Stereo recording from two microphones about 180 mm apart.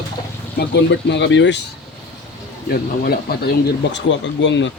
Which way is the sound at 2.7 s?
55° left (ahead or behind).